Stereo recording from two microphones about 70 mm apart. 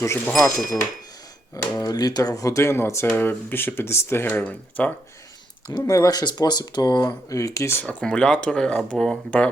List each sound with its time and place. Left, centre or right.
0.0 s speech: left
1.5 s speech: left
3.1 s speech: left
4.4 s speech: left
5.8 s speech: left
7.3 s speech: left
8.0 s speech: centre